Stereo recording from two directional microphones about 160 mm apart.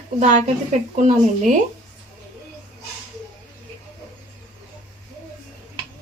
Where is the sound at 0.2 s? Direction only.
50° right (ahead or behind).